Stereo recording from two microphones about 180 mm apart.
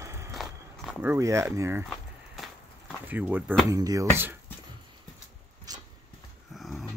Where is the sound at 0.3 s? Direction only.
Centre (ahead or behind).